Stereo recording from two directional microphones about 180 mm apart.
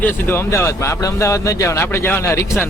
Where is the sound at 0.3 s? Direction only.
10° left (ahead or behind).